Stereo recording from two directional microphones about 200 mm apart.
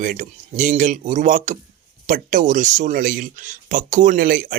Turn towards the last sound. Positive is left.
turn(degrees=-45)  # may be behind; listen again after turning